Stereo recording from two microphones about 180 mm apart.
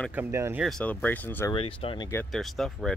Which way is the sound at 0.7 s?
5° left (ahead or behind).